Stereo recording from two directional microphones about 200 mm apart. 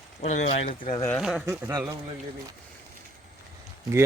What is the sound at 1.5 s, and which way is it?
Speech, 15° right (ahead or behind).